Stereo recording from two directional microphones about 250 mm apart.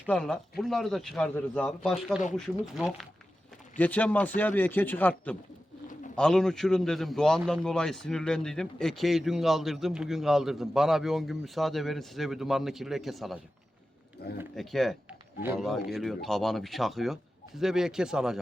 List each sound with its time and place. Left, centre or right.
0.1 s a man's voice: centre
14.2 s speech: left
14.5 s a man's voice: centre